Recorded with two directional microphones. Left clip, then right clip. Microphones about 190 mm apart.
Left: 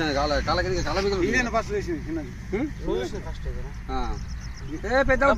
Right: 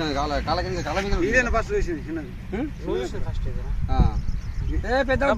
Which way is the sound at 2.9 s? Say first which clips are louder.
Right 2 dB; 5° left (ahead or behind).